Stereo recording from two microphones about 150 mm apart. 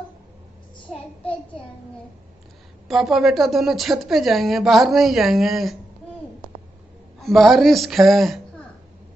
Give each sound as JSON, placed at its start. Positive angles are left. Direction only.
{"t": 2.9, "sound": "a woman's voice", "side_deg": 0}
{"t": 7.2, "sound": "a woman's voice", "side_deg": 0}